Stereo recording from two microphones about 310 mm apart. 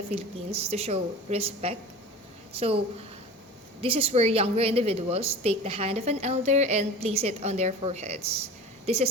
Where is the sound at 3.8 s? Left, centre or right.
Centre.